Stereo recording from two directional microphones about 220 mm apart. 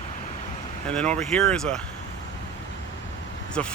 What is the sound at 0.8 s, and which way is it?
Speech, 5° left (ahead or behind).